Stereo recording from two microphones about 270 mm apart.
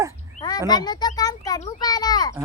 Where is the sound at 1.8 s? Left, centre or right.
Centre.